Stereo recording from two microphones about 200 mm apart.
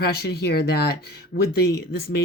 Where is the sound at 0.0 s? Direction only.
55° left (ahead or behind).